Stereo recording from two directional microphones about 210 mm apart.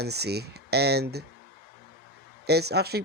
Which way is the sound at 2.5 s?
50° right (ahead or behind).